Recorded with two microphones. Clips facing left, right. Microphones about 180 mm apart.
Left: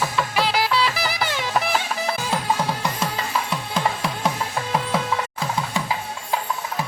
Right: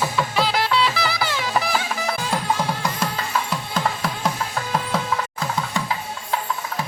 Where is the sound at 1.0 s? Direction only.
15° left (ahead or behind).